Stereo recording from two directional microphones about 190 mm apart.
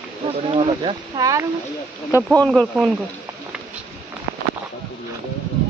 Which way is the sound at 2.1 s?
15° left (ahead or behind).